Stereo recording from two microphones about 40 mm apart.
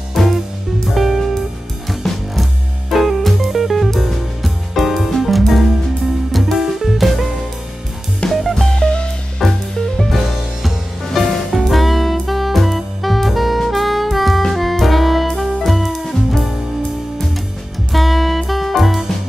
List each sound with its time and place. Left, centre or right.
0.8 s music: centre
8.3 s music: centre
8.7 s music: left
9.4 s music: centre
11.6 s saxophone: centre
14.5 s music: centre
17.9 s music: centre